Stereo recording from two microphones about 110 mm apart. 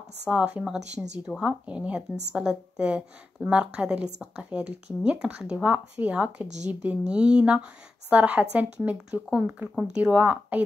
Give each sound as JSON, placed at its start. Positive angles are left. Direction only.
{"t": 0.3, "sound": "speech", "side_deg": -10}
{"t": 6.4, "sound": "speech", "side_deg": -90}
{"t": 6.7, "sound": "speech", "side_deg": -15}